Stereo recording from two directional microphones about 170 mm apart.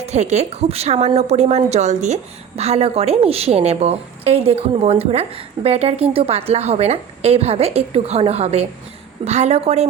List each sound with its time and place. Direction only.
0.0 s a woman's voice: 40° right (ahead or behind)